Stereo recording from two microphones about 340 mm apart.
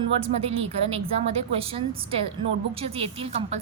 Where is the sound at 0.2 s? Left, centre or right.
Centre.